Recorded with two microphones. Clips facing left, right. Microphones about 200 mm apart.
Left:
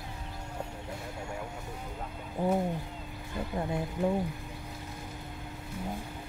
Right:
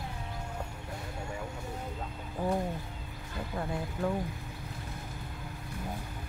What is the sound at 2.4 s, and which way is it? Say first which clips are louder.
Speech: left 3 dB; 20° left (ahead or behind).